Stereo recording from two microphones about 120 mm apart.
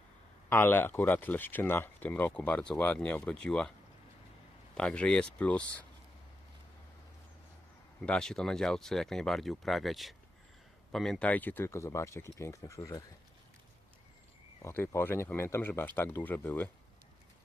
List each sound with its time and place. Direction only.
0.5 s speech: 20° left (ahead or behind)
4.8 s speech: 10° left (ahead or behind)
8.0 s speech: 5° left (ahead or behind)
11.3 s speech: 15° left (ahead or behind)
14.6 s speech: 20° left (ahead or behind)